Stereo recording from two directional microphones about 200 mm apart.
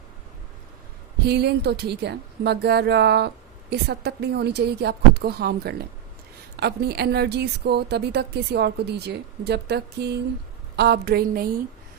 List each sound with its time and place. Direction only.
1.2 s a woman's voice: 55° right (ahead or behind)